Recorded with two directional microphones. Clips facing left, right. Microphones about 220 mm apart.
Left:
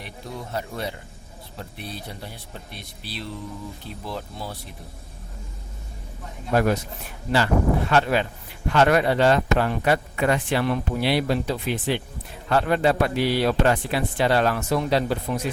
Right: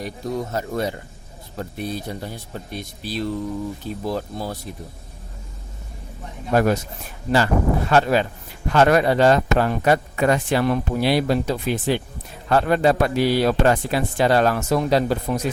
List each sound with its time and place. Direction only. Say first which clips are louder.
0.0 s a man's voice: right 9 dB; 45° right (ahead or behind)
7.3 s a man's voice: right 2 dB; 40° right (ahead or behind)